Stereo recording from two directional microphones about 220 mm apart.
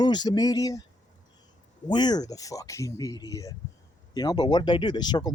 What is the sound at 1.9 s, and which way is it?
Speech, 20° left (ahead or behind).